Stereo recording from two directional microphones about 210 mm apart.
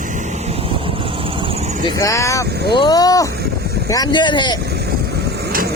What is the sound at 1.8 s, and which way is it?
Speech, 15° left (ahead or behind).